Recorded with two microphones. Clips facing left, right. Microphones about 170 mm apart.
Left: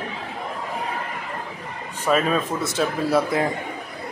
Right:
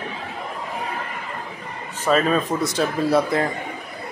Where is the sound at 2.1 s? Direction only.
5° left (ahead or behind).